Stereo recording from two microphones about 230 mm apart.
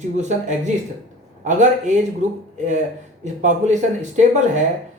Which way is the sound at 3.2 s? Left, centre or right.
Right.